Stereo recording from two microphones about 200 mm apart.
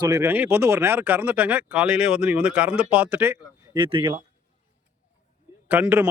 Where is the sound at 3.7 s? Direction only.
25° right (ahead or behind).